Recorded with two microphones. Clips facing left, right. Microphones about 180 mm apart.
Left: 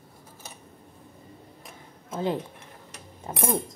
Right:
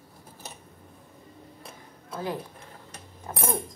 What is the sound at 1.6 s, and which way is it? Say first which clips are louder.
Tick-tock: left 2 dB; 20° left (ahead or behind).